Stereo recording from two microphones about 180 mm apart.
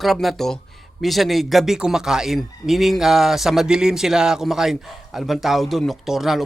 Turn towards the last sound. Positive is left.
turn(degrees=0)  # may be behind; listen again after turning